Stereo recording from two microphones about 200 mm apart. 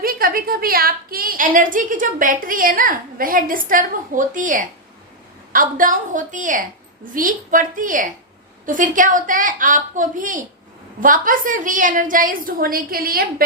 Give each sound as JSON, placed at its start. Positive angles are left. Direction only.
{"t": 0.0, "sound": "a woman's voice", "side_deg": -45}